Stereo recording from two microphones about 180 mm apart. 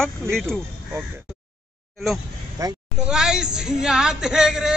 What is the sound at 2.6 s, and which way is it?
Speech, 20° right (ahead or behind).